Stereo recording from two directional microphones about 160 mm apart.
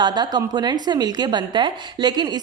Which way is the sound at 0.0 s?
25° right (ahead or behind).